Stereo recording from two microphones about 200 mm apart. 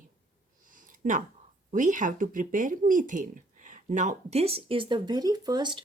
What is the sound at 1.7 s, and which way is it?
A woman's voice, 40° right (ahead or behind).